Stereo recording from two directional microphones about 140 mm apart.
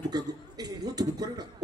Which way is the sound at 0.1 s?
30° right (ahead or behind).